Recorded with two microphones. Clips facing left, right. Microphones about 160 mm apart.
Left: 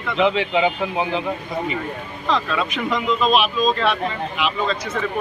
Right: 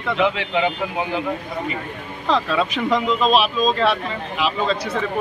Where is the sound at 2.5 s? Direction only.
35° right (ahead or behind).